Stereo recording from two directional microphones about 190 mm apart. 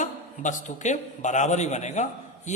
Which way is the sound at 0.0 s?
40° left (ahead or behind).